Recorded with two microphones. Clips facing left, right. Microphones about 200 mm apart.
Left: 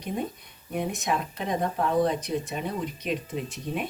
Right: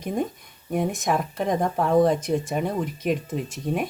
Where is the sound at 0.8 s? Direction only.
50° right (ahead or behind).